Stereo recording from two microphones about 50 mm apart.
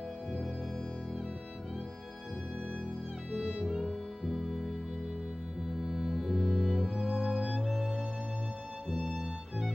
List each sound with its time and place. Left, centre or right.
4.3 s music: centre
5.8 s music: centre
7.0 s music: centre
8.9 s music: centre